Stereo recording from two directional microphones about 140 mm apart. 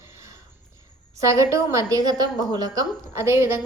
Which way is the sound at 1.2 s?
20° right (ahead or behind).